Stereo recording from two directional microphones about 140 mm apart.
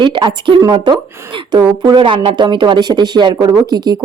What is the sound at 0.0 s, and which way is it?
A woman's voice, 35° right (ahead or behind).